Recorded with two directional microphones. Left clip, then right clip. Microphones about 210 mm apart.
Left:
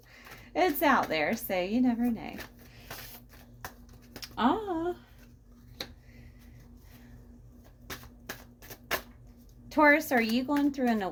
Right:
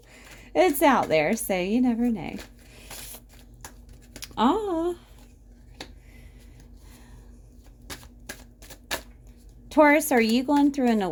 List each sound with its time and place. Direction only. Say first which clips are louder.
0.1 s a woman's voice: right 7 dB; 50° right (ahead or behind)
4.2 s a sound: right 5 dB; 55° right (ahead or behind)
9.6 s a woman's voice: right 4 dB; 50° right (ahead or behind)